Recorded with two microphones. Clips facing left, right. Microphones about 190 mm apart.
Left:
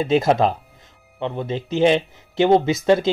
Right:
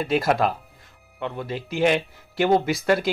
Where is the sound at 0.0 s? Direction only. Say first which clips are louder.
Left 4 dB; 25° left (ahead or behind).